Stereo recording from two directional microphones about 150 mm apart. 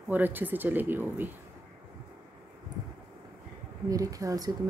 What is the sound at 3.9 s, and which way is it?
Speech, 25° right (ahead or behind).